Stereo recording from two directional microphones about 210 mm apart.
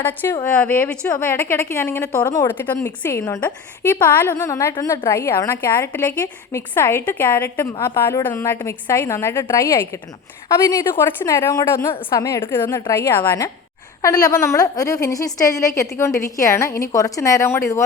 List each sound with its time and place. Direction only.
0.0 s a woman's voice: 10° left (ahead or behind)